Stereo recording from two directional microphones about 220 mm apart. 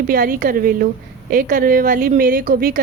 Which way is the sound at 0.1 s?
40° right (ahead or behind).